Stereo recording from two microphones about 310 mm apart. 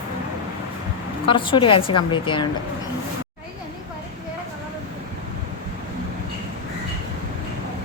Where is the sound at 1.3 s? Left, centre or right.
Centre.